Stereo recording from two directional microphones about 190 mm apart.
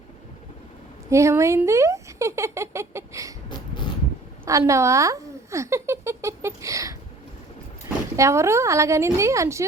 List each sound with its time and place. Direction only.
1.1 s speech: 15° right (ahead or behind)
4.4 s speech: 15° right (ahead or behind)
8.1 s speech: 15° right (ahead or behind)